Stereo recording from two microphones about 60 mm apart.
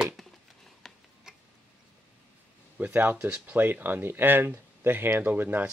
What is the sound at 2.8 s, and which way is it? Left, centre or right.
Speech, right.